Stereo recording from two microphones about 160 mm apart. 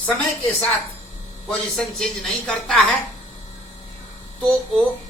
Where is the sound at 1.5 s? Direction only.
5° left (ahead or behind).